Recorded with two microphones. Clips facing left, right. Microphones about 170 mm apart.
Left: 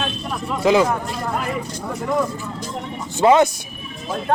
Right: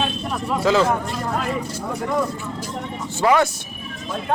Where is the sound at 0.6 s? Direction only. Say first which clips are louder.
Left 3 dB; 15° left (ahead or behind).